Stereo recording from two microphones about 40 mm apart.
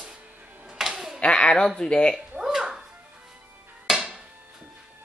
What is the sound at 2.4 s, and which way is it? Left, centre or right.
Music, centre.